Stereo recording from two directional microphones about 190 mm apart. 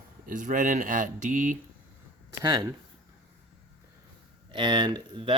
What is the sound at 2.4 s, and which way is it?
Speech, 20° right (ahead or behind).